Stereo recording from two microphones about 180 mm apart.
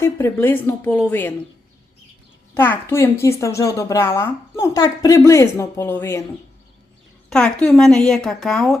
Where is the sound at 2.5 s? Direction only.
10° left (ahead or behind).